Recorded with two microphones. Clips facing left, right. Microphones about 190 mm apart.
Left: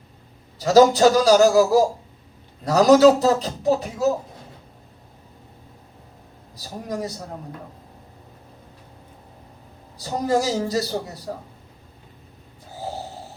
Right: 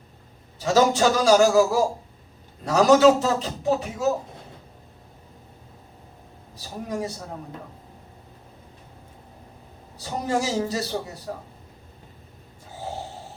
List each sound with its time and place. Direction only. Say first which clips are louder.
0.6 s speech: left 5 dB; 35° left (ahead or behind)
6.6 s speech: left 1 dB; 35° left (ahead or behind)
10.0 s speech: left 4 dB; 35° left (ahead or behind)